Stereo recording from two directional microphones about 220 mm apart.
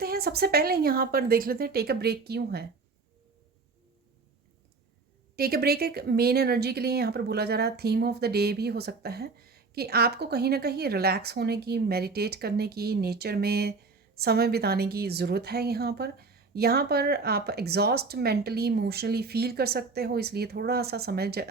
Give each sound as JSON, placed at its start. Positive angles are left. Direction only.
{"t": 0.0, "sound": "speech", "side_deg": -45}
{"t": 5.4, "sound": "speech", "side_deg": -45}